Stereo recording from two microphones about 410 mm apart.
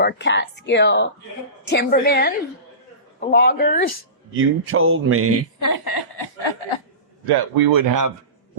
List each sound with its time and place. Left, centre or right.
0.0 s a woman's voice: left
4.4 s speech: right
5.5 s chuckle: left
7.3 s speech: right